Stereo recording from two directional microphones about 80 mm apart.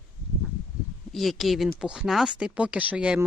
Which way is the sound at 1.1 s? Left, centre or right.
Centre.